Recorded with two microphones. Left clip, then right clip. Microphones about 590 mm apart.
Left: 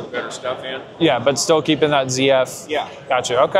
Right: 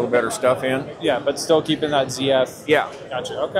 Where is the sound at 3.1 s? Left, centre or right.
Left.